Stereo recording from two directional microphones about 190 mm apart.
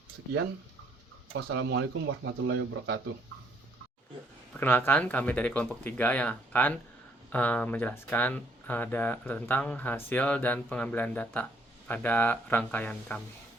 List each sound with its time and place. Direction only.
1.3 s speech: 85° right; by 3.0 s 65° right (ahead or behind)
4.5 s speech: 10° left (ahead or behind)